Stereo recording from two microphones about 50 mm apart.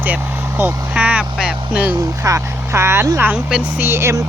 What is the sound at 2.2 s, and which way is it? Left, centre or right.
Speech, right.